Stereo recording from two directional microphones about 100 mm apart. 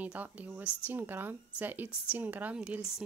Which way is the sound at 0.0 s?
15° right (ahead or behind).